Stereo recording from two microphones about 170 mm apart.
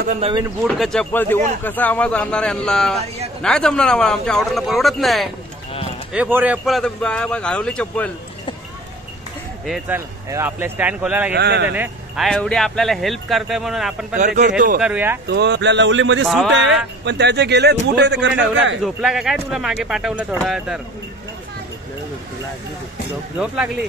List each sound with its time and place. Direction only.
0.2 s speech: 30° right (ahead or behind)
0.7 s speech: 5° left (ahead or behind)
6.1 s speech: 10° right (ahead or behind); by 8.1 s 5° left (ahead or behind)
9.8 s speech: 15° right (ahead or behind)
11.3 s a man's voice: 85° right
11.7 s speech: 10° right (ahead or behind)
12.3 s speech: 5° left (ahead or behind)
15.2 s speech: 85° right
16.3 s speech: centre (ahead or behind)
16.5 s a man's voice: 90° right
18.8 s speech: centre (ahead or behind)
23.4 s speech: 5° right (ahead or behind)